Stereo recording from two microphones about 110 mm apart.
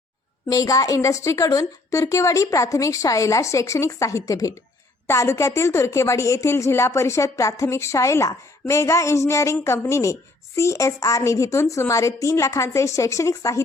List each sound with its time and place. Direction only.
0.5 s speech: 30° left (ahead or behind)